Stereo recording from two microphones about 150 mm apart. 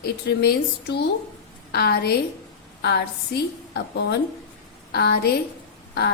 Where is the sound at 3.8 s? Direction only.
90° left.